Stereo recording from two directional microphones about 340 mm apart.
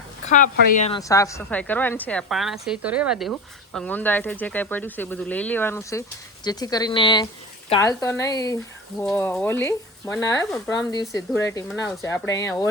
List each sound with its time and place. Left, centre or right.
0.3 s a woman's voice: left